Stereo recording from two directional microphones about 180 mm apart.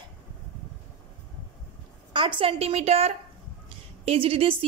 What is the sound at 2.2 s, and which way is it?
Speech, 30° right (ahead or behind).